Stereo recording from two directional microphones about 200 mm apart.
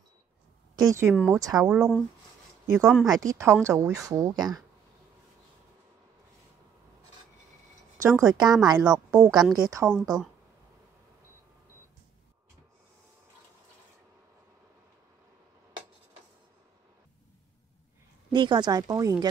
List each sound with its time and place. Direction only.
0.8 s speech: 15° right (ahead or behind)
8.2 s speech: 20° right (ahead or behind)
9.8 s a woman's voice: 5° left (ahead or behind)
18.3 s speech: 20° right (ahead or behind)